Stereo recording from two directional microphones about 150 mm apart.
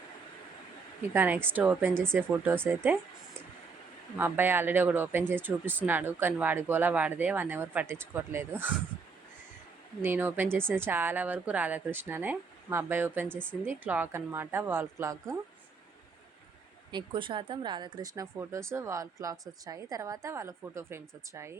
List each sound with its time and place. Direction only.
1.1 s speech: 15° right (ahead or behind)
1.9 s speech: 5° left (ahead or behind)
2.1 s speech: 15° right (ahead or behind)
4.2 s speech: 15° right (ahead or behind)
10.0 s speech: 15° right (ahead or behind)
16.9 s speech: 35° right (ahead or behind); by 21.6 s 15° right (ahead or behind)